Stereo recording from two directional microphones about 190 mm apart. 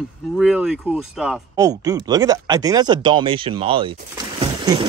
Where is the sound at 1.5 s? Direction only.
20° right (ahead or behind).